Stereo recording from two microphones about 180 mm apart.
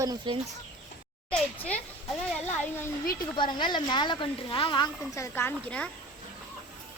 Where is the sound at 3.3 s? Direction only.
25° left (ahead or behind); by 5.9 s 10° left (ahead or behind).